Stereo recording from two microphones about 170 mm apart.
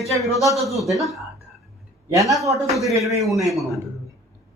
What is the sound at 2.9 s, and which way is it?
Speech, 20° right (ahead or behind).